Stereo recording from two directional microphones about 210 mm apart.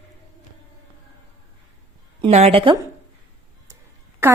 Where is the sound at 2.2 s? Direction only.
30° right (ahead or behind).